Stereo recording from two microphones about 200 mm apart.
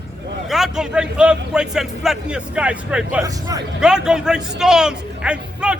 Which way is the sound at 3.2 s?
20° right (ahead or behind).